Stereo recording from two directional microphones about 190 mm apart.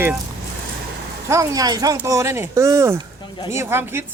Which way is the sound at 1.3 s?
15° right (ahead or behind).